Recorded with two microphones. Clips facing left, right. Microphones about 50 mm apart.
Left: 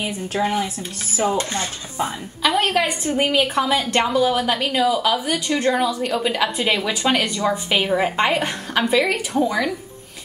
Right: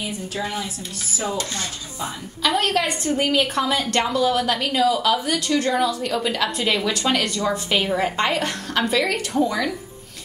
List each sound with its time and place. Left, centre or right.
0.0 s speech: left
1.1 s dishes: left
2.4 s a woman's voice: centre